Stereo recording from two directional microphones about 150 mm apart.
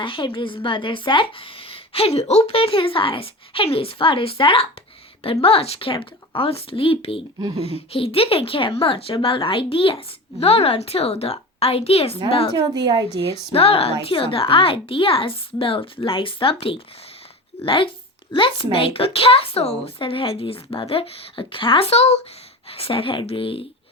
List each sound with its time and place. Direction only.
0.0 s a woman's voice: 35° left (ahead or behind)
12.5 s a woman's voice: 25° right (ahead or behind)
13.5 s a woman's voice: 40° left (ahead or behind)